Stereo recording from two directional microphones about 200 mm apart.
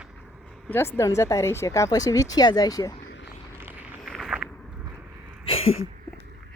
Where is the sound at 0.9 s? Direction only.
15° left (ahead or behind).